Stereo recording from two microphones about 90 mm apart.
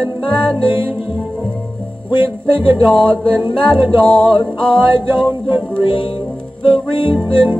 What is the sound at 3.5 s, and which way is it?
Music, 65° left (ahead or behind).